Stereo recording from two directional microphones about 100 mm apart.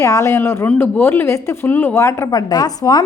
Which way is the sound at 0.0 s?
30° left (ahead or behind).